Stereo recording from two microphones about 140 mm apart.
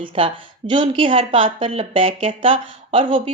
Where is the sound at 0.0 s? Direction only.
40° right (ahead or behind).